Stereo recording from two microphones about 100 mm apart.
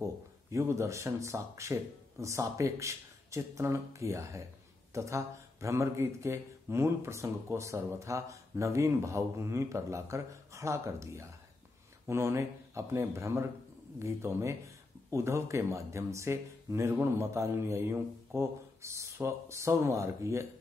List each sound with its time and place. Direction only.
0.5 s speech: 30° right (ahead or behind)